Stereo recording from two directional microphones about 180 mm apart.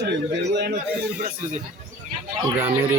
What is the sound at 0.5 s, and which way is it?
Speech, 70° right (ahead or behind).